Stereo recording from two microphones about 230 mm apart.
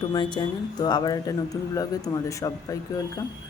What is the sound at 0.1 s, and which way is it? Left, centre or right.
Speech, centre.